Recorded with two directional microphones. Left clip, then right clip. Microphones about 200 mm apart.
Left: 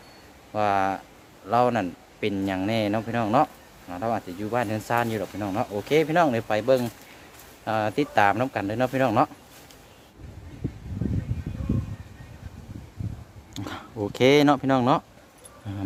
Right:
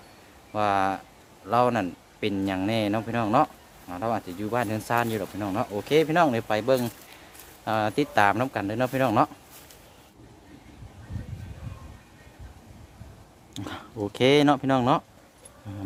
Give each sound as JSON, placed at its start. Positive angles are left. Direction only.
{"t": 0.5, "sound": "speech", "side_deg": -10}
{"t": 13.5, "sound": "speech", "side_deg": 0}
{"t": 15.7, "sound": "speech", "side_deg": 15}